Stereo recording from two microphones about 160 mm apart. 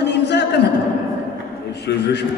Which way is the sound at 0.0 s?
90° left.